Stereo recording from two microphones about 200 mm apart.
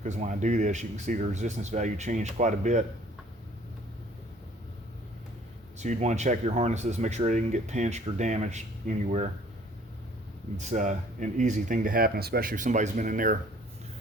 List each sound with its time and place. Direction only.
0.0 s speech: 35° right (ahead or behind)
5.8 s speech: 35° right (ahead or behind)
10.6 s speech: 35° right (ahead or behind)